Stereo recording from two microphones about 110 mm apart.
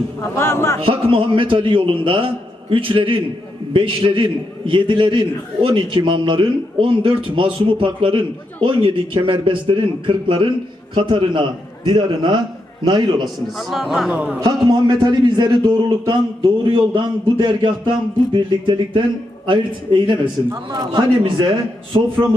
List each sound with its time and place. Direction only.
0.2 s speech: 25° left (ahead or behind)
0.8 s a man's voice: 55° right (ahead or behind)
13.6 s a man's voice: centre (ahead or behind)
14.1 s speech: 15° right (ahead or behind)
14.4 s a man's voice: 40° right (ahead or behind)